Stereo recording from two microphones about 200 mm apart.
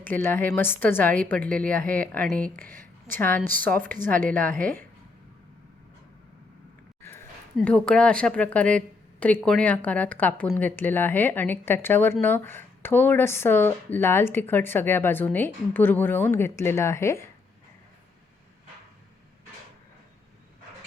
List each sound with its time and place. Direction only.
0.0 s speech: 10° left (ahead or behind)
2.6 s a sound: 45° right (ahead or behind)
3.2 s speech: 10° left (ahead or behind)
7.6 s a woman's voice: 5° left (ahead or behind)